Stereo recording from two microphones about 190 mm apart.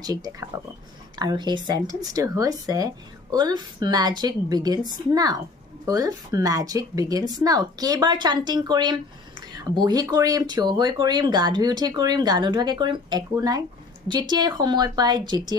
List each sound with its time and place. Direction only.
0.0 s speech: 20° right (ahead or behind)